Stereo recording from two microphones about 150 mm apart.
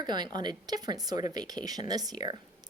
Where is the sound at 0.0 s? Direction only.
30° right (ahead or behind).